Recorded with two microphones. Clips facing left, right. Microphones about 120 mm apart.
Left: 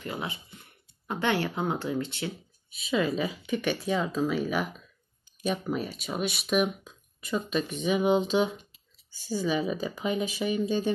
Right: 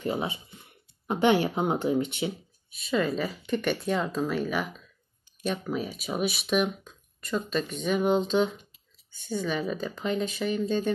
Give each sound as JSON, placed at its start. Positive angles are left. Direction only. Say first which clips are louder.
{"t": 0.0, "sound": "speech", "louder": "right 5 dB", "side_deg": -20}
{"t": 2.7, "sound": "speech", "louder": "even", "side_deg": 0}